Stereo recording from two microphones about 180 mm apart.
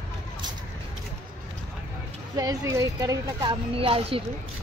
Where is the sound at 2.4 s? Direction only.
15° right (ahead or behind).